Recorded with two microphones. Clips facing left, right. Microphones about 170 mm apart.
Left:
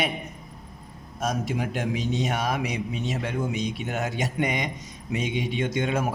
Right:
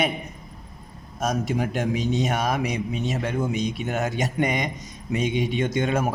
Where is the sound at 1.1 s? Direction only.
45° right (ahead or behind).